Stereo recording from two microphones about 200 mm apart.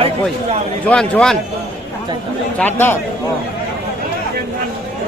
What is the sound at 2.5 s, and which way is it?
Speech, 10° left (ahead or behind).